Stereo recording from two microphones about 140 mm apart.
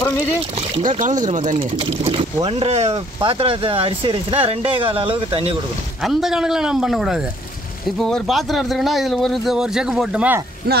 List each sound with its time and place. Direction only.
0.8 s speech: 65° right (ahead or behind)
1.6 s speech: 45° right (ahead or behind)
6.0 s speech: centre (ahead or behind)
10.6 s speech: 90° right